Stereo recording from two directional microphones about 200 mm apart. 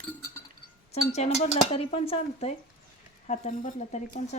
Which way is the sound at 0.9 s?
30° left (ahead or behind).